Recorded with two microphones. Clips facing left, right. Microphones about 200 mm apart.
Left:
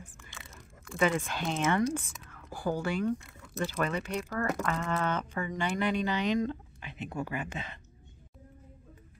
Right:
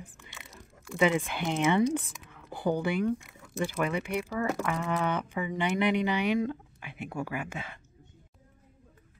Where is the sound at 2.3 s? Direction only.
20° right (ahead or behind).